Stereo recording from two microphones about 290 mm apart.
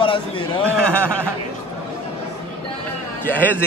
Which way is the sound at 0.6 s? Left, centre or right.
Centre.